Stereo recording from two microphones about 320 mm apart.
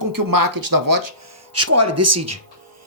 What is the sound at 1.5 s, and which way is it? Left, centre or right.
Speech, right.